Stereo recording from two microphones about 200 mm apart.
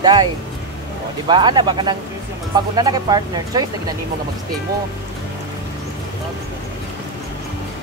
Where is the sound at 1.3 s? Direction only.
25° right (ahead or behind).